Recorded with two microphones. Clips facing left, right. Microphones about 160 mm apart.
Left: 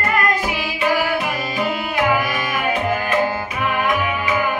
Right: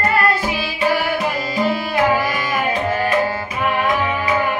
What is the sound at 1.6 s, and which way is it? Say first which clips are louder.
Music: right 2 dB; 30° right (ahead or behind).